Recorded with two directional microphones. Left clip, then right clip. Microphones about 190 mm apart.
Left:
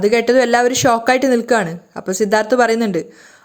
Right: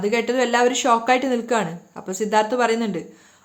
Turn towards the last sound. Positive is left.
turn(degrees=30)  # may be behind; listen again after turning